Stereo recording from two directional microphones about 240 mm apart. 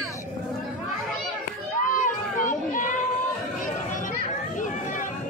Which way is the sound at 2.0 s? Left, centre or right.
Left.